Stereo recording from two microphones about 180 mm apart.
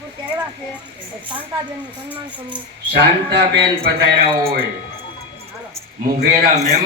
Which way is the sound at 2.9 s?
70° right (ahead or behind).